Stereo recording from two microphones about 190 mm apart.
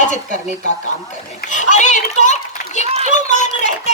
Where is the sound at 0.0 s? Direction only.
40° left (ahead or behind).